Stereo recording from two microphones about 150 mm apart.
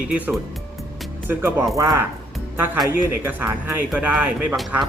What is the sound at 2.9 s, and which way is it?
Speech, 10° right (ahead or behind).